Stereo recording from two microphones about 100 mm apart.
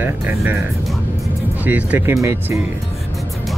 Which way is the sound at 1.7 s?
15° right (ahead or behind).